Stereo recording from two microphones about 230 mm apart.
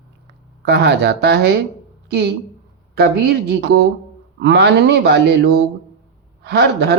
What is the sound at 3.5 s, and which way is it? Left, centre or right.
A woman's voice, right.